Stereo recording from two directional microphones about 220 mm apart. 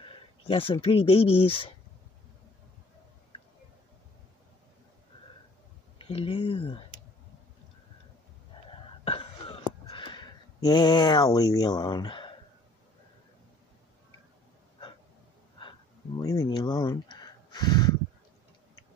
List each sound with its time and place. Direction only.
0.0 s speech: 25° left (ahead or behind)
5.9 s speech: 25° left (ahead or behind)
9.0 s a sound: 25° left (ahead or behind)
16.2 s speech: 15° left (ahead or behind)